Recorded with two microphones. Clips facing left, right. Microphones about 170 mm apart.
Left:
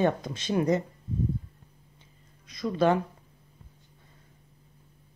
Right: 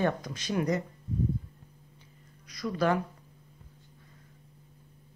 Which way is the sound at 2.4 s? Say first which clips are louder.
Left 4 dB; 25° left (ahead or behind).